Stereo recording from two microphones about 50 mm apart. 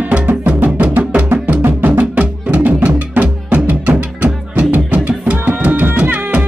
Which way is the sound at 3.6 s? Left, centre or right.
Right.